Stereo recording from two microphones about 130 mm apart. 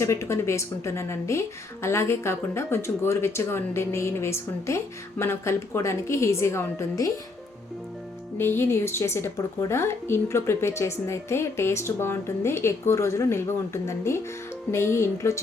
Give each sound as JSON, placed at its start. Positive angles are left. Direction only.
{"t": 0.0, "sound": "a woman's voice", "side_deg": 20}
{"t": 8.4, "sound": "a woman's voice", "side_deg": 15}